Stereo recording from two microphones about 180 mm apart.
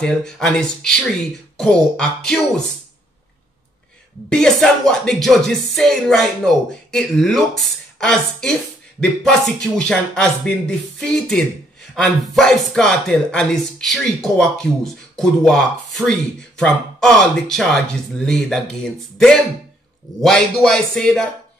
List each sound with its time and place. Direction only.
0.0 s speech: 5° left (ahead or behind)
4.3 s speech: 5° left (ahead or behind)